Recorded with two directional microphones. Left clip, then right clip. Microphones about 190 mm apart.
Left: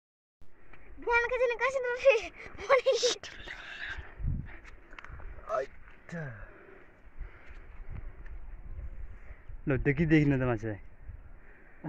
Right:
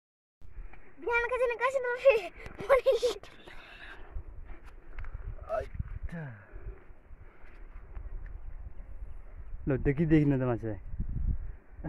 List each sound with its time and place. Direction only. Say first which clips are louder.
0.7 s speech: left 2 dB; 45° right (ahead or behind); by 3.0 s 65° right (ahead or behind)
3.0 s a sound: left 1 dB; centre (ahead or behind)
6.0 s speech: left 4 dB; 30° left (ahead or behind)
9.7 s a man's voice: even; 15° right (ahead or behind)